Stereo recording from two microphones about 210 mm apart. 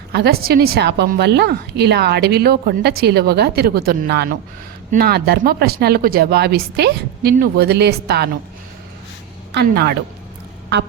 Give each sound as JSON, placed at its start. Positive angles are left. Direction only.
{"t": 0.1, "sound": "a woman's voice", "side_deg": -50}
{"t": 9.6, "sound": "a woman's voice", "side_deg": -50}